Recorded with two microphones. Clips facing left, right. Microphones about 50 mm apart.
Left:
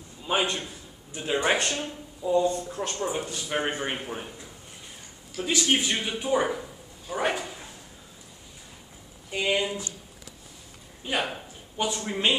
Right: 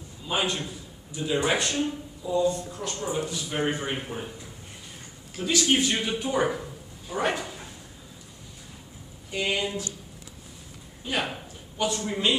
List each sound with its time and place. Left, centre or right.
0.3 s a man's voice: left
5.4 s a man's voice: left
9.3 s speech: centre
11.0 s a man's voice: left